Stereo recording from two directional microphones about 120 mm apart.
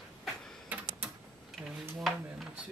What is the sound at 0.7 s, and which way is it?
Typing, 15° right (ahead or behind).